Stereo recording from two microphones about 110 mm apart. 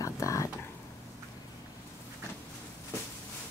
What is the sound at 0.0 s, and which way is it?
Whispering, 30° left (ahead or behind).